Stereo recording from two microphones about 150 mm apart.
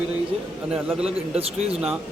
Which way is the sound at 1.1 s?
45° right (ahead or behind).